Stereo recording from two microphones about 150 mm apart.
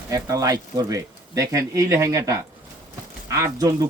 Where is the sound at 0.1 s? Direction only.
25° right (ahead or behind).